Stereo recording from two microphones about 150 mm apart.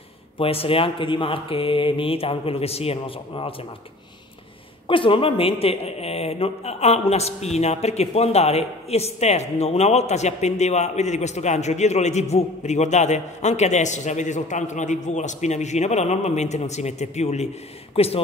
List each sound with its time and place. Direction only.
0.4 s speech: 40° left (ahead or behind)
4.8 s speech: 35° left (ahead or behind)